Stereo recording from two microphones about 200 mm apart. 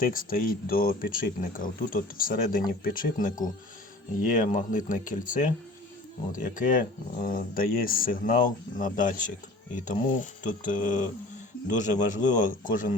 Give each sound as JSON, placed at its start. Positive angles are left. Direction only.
{"t": 0.0, "sound": "speech", "side_deg": 45}